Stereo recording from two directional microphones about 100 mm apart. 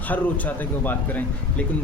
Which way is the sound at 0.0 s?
15° left (ahead or behind).